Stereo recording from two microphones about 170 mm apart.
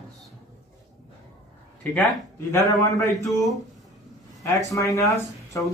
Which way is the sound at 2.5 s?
20° left (ahead or behind).